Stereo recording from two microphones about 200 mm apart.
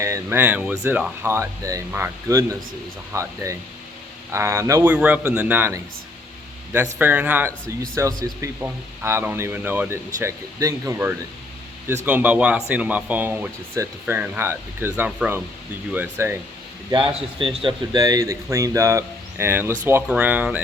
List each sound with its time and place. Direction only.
0.0 s speech: 15° right (ahead or behind)
7.0 s speech: 10° right (ahead or behind)
17.4 s speech: 25° right (ahead or behind); by 20.6 s 10° right (ahead or behind)